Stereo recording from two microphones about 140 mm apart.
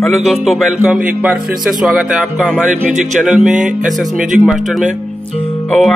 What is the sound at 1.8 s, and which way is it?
Speech, 5° right (ahead or behind).